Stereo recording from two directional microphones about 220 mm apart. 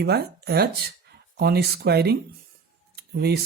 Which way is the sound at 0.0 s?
45° right (ahead or behind).